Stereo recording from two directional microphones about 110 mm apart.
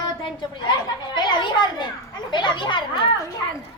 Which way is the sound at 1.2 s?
40° left (ahead or behind).